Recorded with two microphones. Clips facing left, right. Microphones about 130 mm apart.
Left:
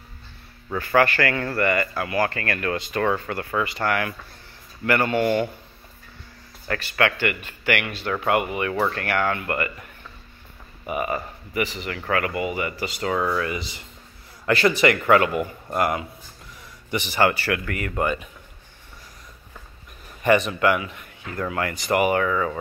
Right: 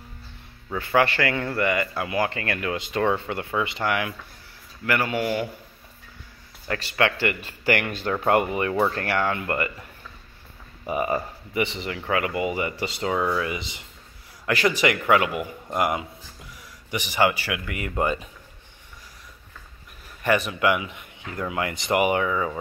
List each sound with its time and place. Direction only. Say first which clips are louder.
0.7 s speech: left 2 dB; 20° right (ahead or behind)
6.7 s a man's voice: left 1 dB; 25° right (ahead or behind)
11.0 s speech: right 2 dB; 25° right (ahead or behind)
11.9 s speech: left 1 dB; 15° right (ahead or behind)
13.4 s speech: left 1 dB; 15° right (ahead or behind)
20.2 s speech: left 3 dB; 5° right (ahead or behind)